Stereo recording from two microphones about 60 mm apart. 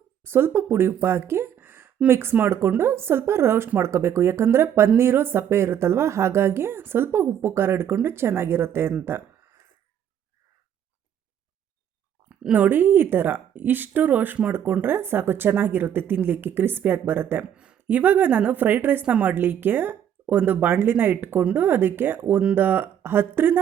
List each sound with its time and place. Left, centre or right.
0.3 s a woman's voice: right
12.5 s speech: right
19.0 s a woman's voice: centre
19.3 s speech: right